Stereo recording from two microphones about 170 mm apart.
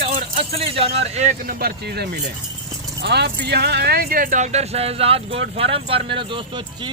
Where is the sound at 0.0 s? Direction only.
35° right (ahead or behind).